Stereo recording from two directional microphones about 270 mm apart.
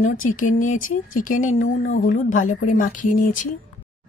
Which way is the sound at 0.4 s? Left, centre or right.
Left.